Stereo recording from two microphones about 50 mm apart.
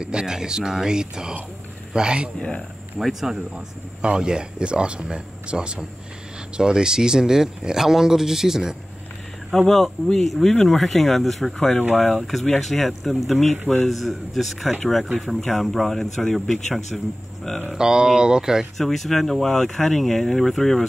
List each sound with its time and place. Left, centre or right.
0.0 s speech: centre
3.0 s speech: centre
4.0 s speech: centre
9.7 s speech: centre
12.2 s speech: centre
17.7 s speech: centre
18.8 s speech: centre